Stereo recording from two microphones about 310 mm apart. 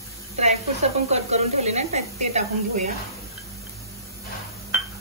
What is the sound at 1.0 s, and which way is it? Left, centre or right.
A woman's voice, right.